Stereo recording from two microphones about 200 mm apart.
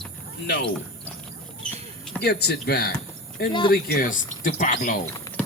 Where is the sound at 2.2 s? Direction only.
55° left (ahead or behind).